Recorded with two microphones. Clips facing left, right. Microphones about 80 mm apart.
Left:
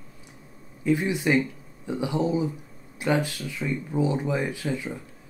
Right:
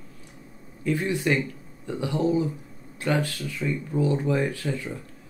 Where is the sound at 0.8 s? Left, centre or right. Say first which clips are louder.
Left 1 dB; centre.